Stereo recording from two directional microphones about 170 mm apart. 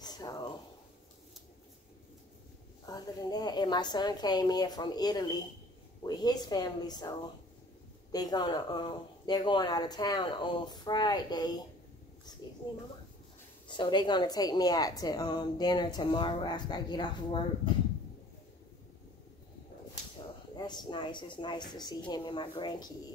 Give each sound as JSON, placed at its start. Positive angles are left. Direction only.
{"t": 0.0, "sound": "a sound", "side_deg": 20}
{"t": 2.9, "sound": "a woman's voice", "side_deg": 20}
{"t": 20.5, "sound": "a woman's voice", "side_deg": 25}